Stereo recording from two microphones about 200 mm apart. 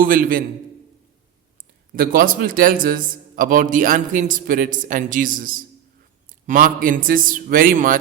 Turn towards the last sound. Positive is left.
turn(degrees=-45)  # may be behind; listen again after turning